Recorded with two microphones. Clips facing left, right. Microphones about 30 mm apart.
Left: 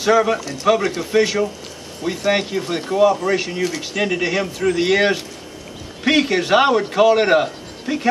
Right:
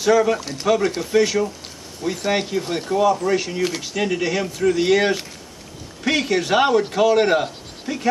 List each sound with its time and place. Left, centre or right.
0.0 s a man's voice: centre